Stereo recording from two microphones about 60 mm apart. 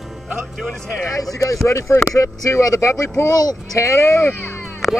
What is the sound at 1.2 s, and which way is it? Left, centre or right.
Speech, left.